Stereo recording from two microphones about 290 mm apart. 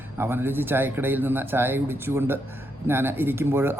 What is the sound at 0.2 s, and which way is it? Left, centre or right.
A man's voice, centre.